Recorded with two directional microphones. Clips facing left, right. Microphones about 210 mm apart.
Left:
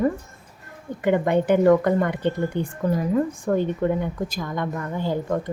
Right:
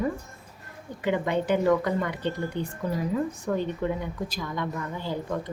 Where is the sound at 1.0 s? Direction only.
55° left (ahead or behind).